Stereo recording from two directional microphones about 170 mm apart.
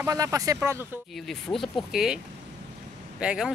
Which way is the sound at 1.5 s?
Centre (ahead or behind).